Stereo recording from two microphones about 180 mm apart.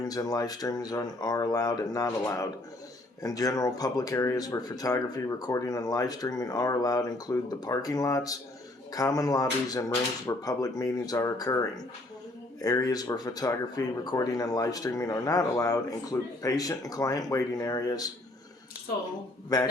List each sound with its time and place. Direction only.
0.0 s speech: 20° left (ahead or behind)
12.6 s speech: 20° left (ahead or behind)